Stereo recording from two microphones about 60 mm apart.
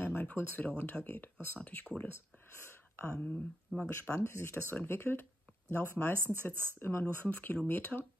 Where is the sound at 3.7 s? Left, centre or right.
Centre.